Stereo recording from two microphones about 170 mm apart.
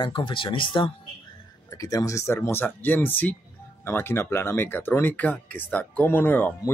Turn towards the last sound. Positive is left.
turn(degrees=10)  # may be behind; listen again after turning